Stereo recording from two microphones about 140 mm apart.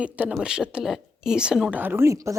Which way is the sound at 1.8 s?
15° right (ahead or behind).